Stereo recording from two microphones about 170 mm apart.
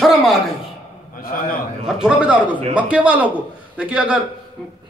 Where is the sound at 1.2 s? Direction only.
55° left (ahead or behind).